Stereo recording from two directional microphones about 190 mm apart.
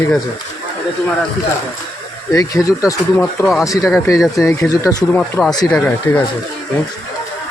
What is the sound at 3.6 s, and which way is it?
Speech, 15° left (ahead or behind).